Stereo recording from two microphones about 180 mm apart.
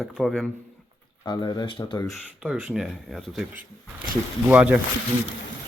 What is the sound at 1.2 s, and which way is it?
Speech, 25° left (ahead or behind).